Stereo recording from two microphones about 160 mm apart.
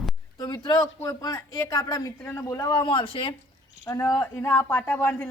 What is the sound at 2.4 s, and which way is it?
Speech, 20° left (ahead or behind).